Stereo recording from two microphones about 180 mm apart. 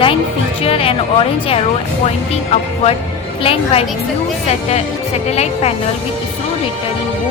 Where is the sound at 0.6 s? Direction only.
30° left (ahead or behind).